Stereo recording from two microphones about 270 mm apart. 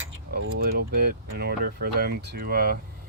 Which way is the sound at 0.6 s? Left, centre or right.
Right.